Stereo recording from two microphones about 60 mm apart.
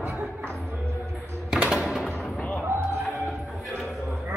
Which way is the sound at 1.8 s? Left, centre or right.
Centre.